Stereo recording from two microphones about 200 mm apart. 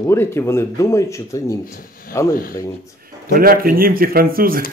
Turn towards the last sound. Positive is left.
turn(degrees=-45)  # may be behind; listen again after turning